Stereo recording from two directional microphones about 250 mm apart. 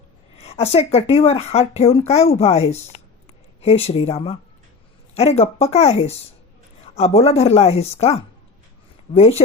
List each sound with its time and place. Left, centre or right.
0.3 s speech: left